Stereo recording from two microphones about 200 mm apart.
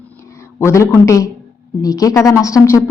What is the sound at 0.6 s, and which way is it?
A woman's voice, 15° left (ahead or behind).